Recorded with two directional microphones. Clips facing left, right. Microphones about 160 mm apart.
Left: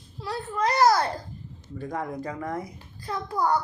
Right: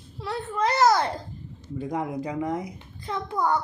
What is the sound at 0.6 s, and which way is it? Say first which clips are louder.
A child's voice: even; 25° right (ahead or behind).